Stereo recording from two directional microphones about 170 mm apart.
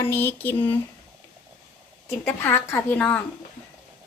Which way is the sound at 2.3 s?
15° left (ahead or behind).